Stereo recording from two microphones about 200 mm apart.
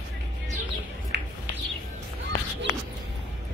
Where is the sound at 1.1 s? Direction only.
60° right (ahead or behind).